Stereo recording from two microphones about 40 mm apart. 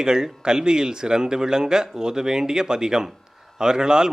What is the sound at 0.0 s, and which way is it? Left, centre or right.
Speech, centre.